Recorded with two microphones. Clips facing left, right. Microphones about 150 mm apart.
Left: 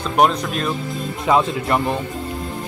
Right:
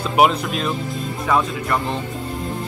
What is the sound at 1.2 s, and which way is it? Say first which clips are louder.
Speech: left 3 dB; 20° left (ahead or behind).